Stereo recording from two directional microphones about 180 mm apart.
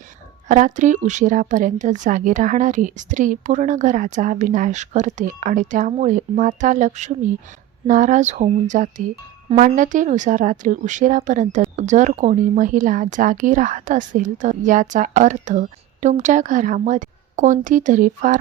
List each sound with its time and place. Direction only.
0.4 s a woman's voice: 45° right (ahead or behind)